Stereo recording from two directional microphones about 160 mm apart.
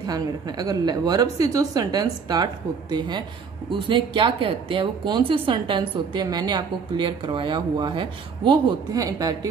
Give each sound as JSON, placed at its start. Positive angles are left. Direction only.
{"t": 0.0, "sound": "a woman's voice", "side_deg": -25}